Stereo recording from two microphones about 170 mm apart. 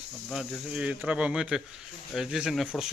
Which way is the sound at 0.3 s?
Centre (ahead or behind).